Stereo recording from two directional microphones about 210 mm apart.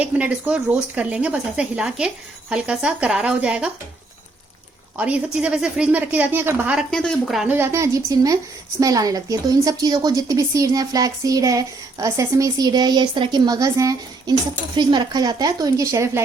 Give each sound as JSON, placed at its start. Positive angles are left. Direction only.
{"t": 0.0, "sound": "speech", "side_deg": -5}
{"t": 4.9, "sound": "a woman's voice", "side_deg": -5}